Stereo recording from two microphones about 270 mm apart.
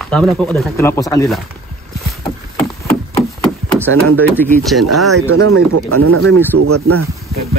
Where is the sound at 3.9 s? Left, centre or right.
Right.